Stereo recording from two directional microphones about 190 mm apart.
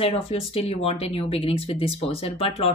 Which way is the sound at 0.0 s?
30° left (ahead or behind).